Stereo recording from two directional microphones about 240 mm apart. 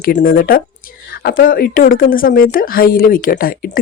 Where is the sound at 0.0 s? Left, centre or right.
Left.